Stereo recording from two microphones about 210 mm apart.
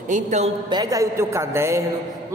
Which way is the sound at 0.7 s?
15° right (ahead or behind).